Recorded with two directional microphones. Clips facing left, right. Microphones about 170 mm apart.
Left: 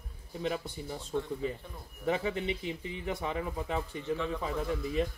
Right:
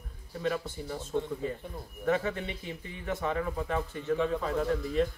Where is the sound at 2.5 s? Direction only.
15° left (ahead or behind).